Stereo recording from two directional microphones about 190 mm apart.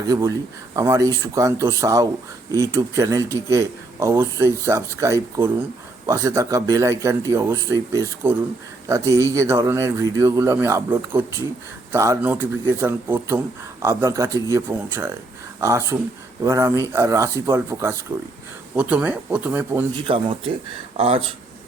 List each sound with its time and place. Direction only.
0.0 s speech: 20° right (ahead or behind)
20.1 s speech: 25° right (ahead or behind)